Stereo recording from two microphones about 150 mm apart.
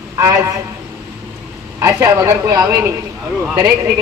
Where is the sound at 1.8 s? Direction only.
20° right (ahead or behind).